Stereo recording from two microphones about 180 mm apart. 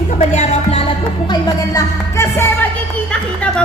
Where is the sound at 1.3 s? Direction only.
15° left (ahead or behind).